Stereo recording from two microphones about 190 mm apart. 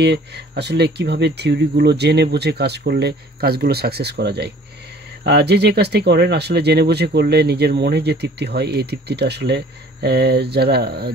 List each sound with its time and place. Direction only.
0.0 s speech: 65° right (ahead or behind)